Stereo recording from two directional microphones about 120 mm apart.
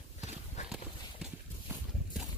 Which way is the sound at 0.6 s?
75° left (ahead or behind).